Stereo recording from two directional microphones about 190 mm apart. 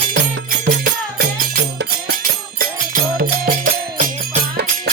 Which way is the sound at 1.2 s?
50° right (ahead or behind).